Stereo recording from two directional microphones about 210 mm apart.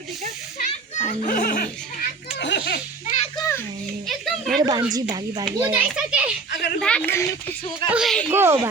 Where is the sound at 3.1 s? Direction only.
30° left (ahead or behind).